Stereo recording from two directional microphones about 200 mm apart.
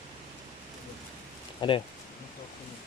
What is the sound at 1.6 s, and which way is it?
Speech, 25° left (ahead or behind).